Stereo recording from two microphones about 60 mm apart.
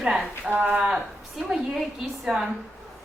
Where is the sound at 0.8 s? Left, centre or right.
Centre.